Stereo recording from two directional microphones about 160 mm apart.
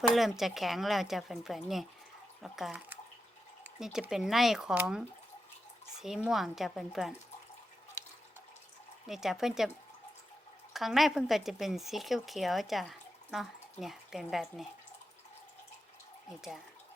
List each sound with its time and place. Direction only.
0.1 s speech: centre (ahead or behind)
9.0 s speech: centre (ahead or behind)
10.8 s speech: centre (ahead or behind)